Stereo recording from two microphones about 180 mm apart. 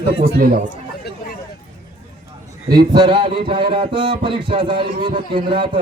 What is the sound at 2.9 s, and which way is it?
A man's voice, 25° right (ahead or behind).